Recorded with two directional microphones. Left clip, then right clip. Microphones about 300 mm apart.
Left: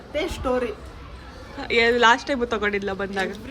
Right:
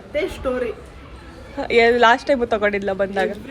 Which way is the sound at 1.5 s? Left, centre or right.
Centre.